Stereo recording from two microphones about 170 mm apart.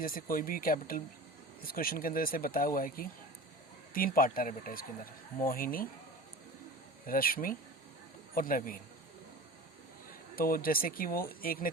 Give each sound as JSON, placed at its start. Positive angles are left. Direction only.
{"t": 0.0, "sound": "speech", "side_deg": 55}
{"t": 7.0, "sound": "speech", "side_deg": 55}
{"t": 10.3, "sound": "speech", "side_deg": 60}